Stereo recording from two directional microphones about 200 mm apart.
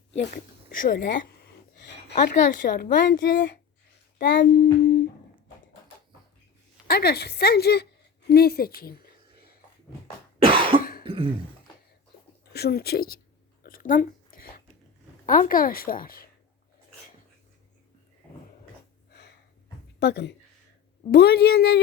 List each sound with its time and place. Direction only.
0.2 s speech: 50° left (ahead or behind)
2.6 s speech: 55° left (ahead or behind)
4.2 s a sound: 55° left (ahead or behind)
6.8 s speech: 50° left (ahead or behind)
10.4 s cough: 25° right (ahead or behind)
12.5 s speech: 50° left (ahead or behind)
13.6 s a sound: 45° left (ahead or behind)
15.3 s speech: 45° left (ahead or behind)
20.0 s a sound: 55° left (ahead or behind)
21.1 s speech: 55° left (ahead or behind)